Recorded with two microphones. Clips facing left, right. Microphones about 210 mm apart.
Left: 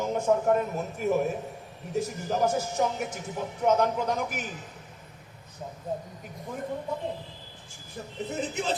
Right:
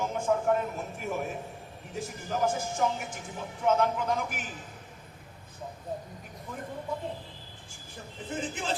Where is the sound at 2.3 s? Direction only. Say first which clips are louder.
Left 1 dB; 40° left (ahead or behind).